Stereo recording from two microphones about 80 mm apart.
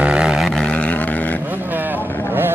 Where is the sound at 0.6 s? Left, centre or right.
Centre.